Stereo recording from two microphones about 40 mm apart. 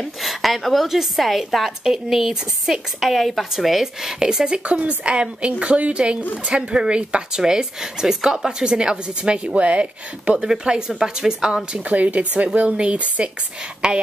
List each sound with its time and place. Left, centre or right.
0.2 s a woman's voice: centre
4.6 s a woman's voice: right
6.5 s a woman's voice: centre
10.4 s a woman's voice: centre
11.9 s speech: right
12.5 s a woman's voice: right